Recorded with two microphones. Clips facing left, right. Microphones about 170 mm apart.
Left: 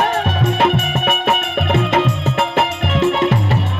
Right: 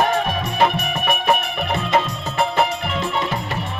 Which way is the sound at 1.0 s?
65° left (ahead or behind).